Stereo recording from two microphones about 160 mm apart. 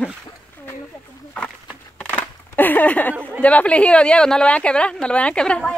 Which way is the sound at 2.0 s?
10° left (ahead or behind).